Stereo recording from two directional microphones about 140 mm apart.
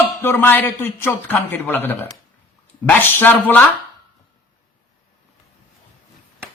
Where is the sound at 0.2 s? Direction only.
15° left (ahead or behind).